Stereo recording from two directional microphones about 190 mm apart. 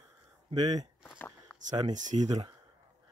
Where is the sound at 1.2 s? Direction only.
10° left (ahead or behind).